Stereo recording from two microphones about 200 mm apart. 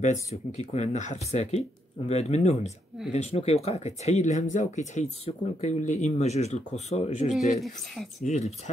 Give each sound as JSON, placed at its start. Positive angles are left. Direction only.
{"t": 0.0, "sound": "speech", "side_deg": 35}
{"t": 7.6, "sound": "speech", "side_deg": 0}
{"t": 8.3, "sound": "speech", "side_deg": 35}